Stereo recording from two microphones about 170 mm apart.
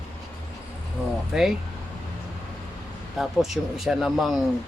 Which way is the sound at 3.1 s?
Centre (ahead or behind).